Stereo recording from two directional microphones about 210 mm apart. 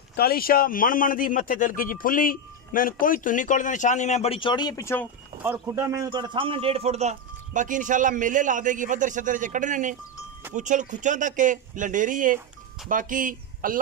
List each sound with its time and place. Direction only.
0.1 s a man's voice: 45° left (ahead or behind); by 5.0 s 15° left (ahead or behind)
5.4 s a man's voice: 10° right (ahead or behind); by 13.7 s 40° right (ahead or behind)